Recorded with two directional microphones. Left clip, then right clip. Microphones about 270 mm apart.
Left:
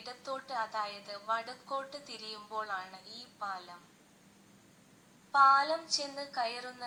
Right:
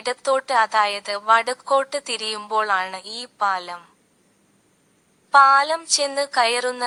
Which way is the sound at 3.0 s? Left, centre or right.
Right.